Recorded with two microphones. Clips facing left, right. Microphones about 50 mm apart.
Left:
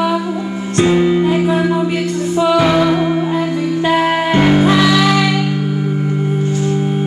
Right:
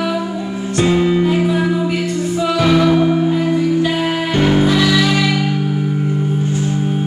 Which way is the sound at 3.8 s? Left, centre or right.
Left.